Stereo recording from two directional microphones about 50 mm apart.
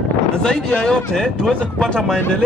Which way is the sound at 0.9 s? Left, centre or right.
Centre.